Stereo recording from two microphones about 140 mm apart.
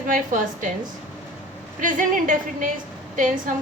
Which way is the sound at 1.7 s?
70° right (ahead or behind).